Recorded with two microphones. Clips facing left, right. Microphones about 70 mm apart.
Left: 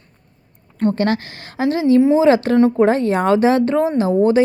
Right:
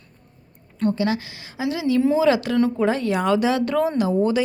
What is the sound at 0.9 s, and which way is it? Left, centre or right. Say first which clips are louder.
Speech: left 4 dB; left.